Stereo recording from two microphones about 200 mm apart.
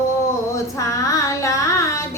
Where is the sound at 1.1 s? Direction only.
15° left (ahead or behind).